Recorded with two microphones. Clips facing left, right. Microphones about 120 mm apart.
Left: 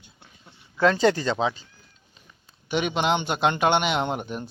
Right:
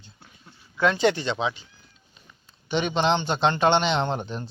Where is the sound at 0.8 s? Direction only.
35° left (ahead or behind).